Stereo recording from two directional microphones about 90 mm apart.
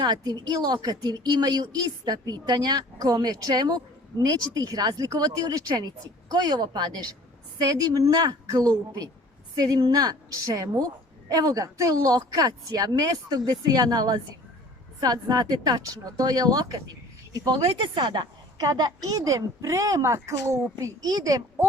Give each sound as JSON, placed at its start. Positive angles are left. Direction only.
{"t": 0.0, "sound": "a woman's voice", "side_deg": -50}
{"t": 17.6, "sound": "a woman's voice", "side_deg": -75}